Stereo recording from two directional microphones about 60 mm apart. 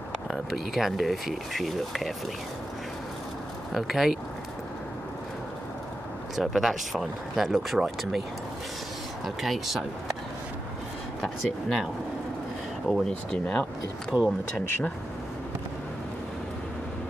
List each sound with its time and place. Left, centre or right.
0.3 s speech: centre
3.7 s speech: centre
6.3 s speech: centre
9.2 s speech: centre
11.1 s speech: centre
12.8 s speech: centre
14.1 s speech: right